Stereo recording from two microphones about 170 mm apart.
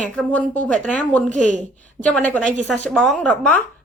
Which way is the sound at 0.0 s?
10° left (ahead or behind).